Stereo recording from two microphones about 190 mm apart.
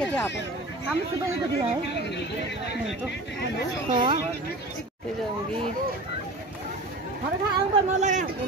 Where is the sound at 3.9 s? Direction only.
25° right (ahead or behind).